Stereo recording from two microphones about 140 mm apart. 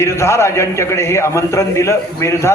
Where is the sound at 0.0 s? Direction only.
20° left (ahead or behind).